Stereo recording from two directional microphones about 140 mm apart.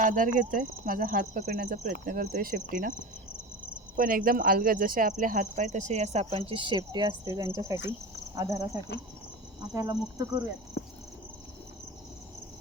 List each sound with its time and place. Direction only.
0.0 s speech: 65° right (ahead or behind)
2.9 s speech: 20° left (ahead or behind)
3.9 s speech: 80° right; by 10.0 s 25° right (ahead or behind)